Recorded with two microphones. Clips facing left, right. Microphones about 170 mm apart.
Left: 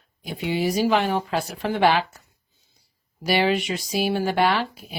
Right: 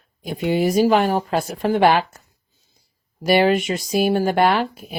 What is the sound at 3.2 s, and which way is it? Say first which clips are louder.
Speech: right 5 dB; 50° right (ahead or behind).